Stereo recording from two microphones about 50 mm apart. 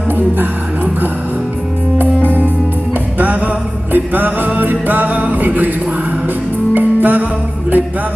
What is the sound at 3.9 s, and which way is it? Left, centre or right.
Music, right.